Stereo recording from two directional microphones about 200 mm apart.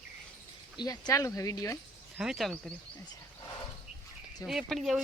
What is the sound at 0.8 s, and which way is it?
Speech, 20° left (ahead or behind).